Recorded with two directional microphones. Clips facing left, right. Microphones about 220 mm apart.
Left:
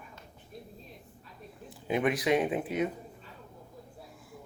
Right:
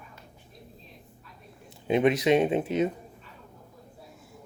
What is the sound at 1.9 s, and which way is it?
Speech, 25° right (ahead or behind).